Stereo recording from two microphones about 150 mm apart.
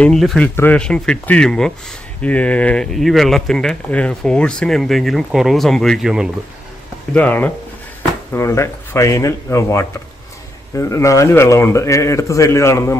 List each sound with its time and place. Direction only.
0.0 s speech: 5° left (ahead or behind)
7.2 s speech: 10° left (ahead or behind)